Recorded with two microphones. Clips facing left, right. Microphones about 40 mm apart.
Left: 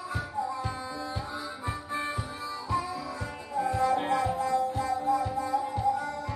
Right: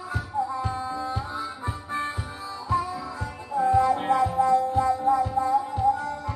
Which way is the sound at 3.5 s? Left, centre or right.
Right.